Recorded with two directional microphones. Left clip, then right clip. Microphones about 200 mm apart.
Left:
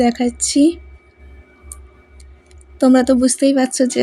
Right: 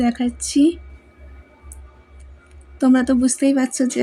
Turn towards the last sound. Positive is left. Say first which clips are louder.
# left 4 dB
turn(degrees=20)  # may be behind; listen again after turning